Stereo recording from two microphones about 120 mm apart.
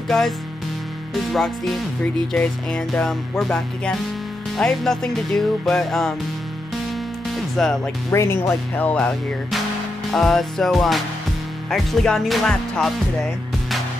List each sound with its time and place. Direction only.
1.1 s music: centre (ahead or behind)
7.3 s speech: 5° left (ahead or behind)
8.1 s speech: 25° left (ahead or behind)
10.1 s music: 5° left (ahead or behind)